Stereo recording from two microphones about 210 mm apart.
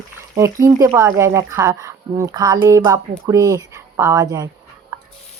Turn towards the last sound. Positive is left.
turn(degrees=-15)  # may be behind; listen again after turning